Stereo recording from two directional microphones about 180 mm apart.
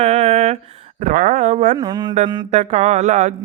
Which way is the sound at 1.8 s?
25° right (ahead or behind).